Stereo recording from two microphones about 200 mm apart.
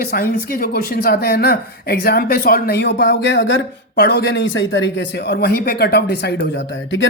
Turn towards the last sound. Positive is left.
turn(degrees=65)  # may be behind; listen again after turning